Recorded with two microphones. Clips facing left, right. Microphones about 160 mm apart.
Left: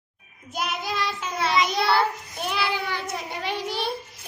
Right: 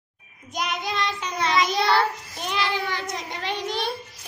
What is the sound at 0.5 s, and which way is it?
Child singing, 5° left (ahead or behind).